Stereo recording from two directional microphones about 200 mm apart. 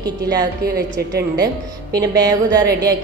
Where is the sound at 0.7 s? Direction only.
50° right (ahead or behind).